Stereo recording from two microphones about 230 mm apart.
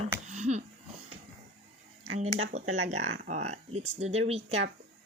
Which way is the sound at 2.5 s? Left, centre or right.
Right.